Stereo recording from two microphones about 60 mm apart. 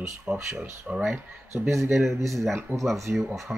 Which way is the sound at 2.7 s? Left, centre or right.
Right.